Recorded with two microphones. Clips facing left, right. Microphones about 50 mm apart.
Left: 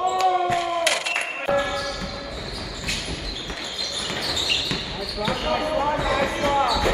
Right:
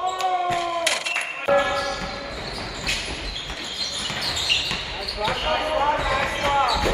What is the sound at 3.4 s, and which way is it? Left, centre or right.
Basketball bounce, centre.